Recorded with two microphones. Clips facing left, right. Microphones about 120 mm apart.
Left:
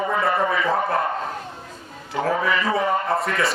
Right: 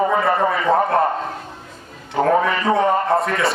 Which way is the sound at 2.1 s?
Centre (ahead or behind).